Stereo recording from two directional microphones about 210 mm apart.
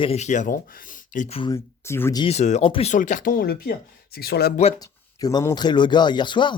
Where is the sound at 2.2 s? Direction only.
30° left (ahead or behind); by 4.5 s 50° left (ahead or behind).